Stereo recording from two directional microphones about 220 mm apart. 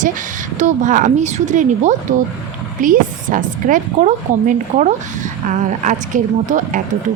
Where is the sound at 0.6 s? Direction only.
35° right (ahead or behind).